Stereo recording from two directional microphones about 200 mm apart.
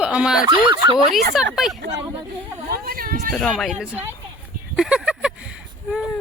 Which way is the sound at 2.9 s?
45° right (ahead or behind).